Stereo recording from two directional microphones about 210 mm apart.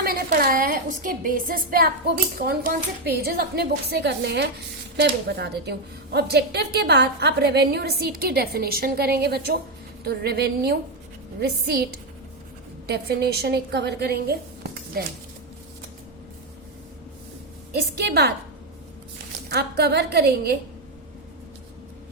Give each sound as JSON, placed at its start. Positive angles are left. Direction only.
{"t": 0.0, "sound": "a woman's voice", "side_deg": -45}
{"t": 12.9, "sound": "a woman's voice", "side_deg": -50}
{"t": 17.9, "sound": "a woman's voice", "side_deg": -50}
{"t": 19.5, "sound": "a woman's voice", "side_deg": -50}